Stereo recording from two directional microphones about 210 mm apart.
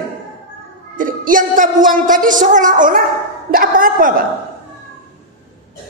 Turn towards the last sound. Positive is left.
turn(degrees=-40)  # may be behind; listen again after turning